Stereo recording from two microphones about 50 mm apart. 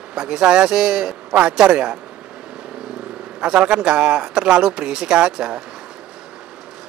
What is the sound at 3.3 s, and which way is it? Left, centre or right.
Speech, centre.